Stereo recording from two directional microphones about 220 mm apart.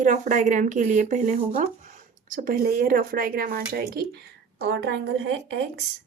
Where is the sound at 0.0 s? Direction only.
35° right (ahead or behind); by 5.8 s 55° right (ahead or behind).